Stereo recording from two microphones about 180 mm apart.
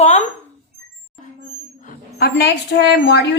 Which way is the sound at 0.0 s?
40° left (ahead or behind).